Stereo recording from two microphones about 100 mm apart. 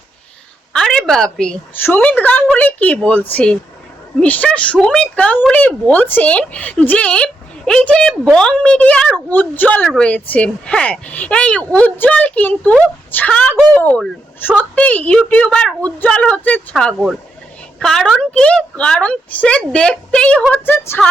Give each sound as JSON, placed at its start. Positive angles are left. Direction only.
{"t": 0.7, "sound": "a sound", "side_deg": 5}
{"t": 1.8, "sound": "speech", "side_deg": 20}
{"t": 17.7, "sound": "speech", "side_deg": 5}
{"t": 20.5, "sound": "a woman's voice", "side_deg": 20}